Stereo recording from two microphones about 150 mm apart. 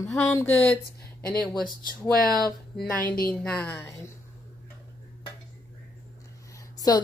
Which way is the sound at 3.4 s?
10° left (ahead or behind).